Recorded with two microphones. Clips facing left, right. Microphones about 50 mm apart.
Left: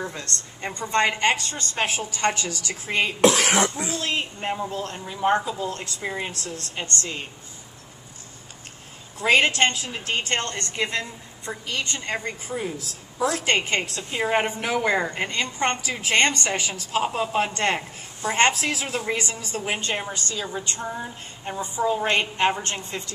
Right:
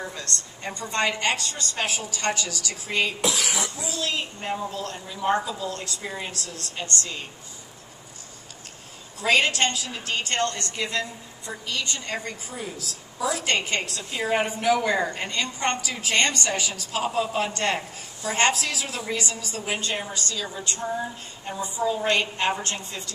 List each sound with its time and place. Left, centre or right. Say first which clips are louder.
0.1 s speech: even; left
3.2 s speech: left 8 dB; left
9.2 s speech: left 2 dB; left